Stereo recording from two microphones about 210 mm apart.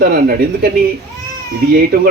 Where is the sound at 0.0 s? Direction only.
45° right (ahead or behind).